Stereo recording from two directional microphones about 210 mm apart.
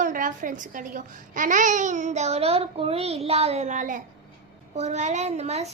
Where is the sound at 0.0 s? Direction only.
40° right (ahead or behind).